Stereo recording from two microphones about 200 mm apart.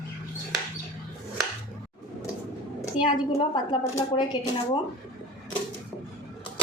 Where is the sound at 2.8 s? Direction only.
25° left (ahead or behind).